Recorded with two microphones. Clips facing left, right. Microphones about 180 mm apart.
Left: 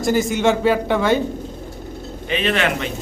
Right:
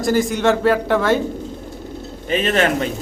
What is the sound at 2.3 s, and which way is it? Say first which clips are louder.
Speech: right 3 dB; 45° right (ahead or behind).